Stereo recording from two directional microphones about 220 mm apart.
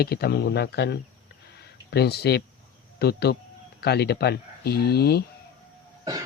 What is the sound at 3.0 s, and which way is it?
Speech, 45° left (ahead or behind).